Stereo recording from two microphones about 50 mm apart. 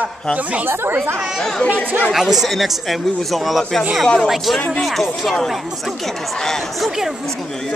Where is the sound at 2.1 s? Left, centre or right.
Centre.